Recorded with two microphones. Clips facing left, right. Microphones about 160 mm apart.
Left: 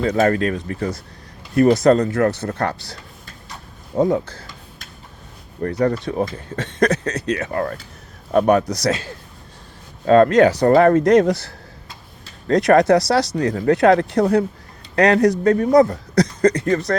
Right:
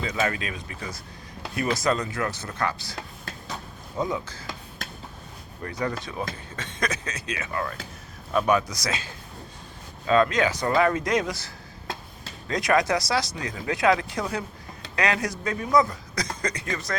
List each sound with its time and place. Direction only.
0.0 s a man's voice: 50° left (ahead or behind)
5.8 s a man's voice: 60° left (ahead or behind)
7.3 s speech: 45° left (ahead or behind)
8.3 s a man's voice: 60° left (ahead or behind)
10.1 s a man's voice: 60° left (ahead or behind)